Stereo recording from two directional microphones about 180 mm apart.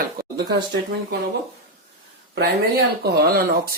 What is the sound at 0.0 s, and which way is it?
Speech, 60° right (ahead or behind).